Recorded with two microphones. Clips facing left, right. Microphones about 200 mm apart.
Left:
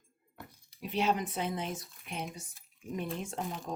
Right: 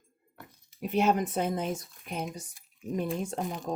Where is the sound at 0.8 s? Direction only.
50° right (ahead or behind).